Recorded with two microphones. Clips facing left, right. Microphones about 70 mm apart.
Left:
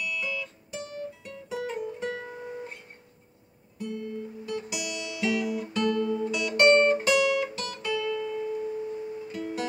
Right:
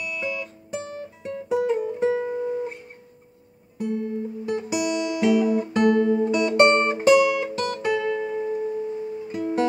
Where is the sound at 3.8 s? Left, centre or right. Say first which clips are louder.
Right 7 dB; right.